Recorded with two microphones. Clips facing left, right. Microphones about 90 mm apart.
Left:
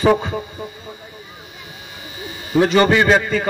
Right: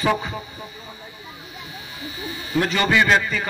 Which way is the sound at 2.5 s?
30° left (ahead or behind).